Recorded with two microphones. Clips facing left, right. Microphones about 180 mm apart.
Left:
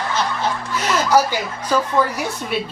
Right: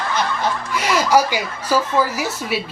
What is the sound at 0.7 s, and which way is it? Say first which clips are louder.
Speech: right 1 dB; 10° right (ahead or behind).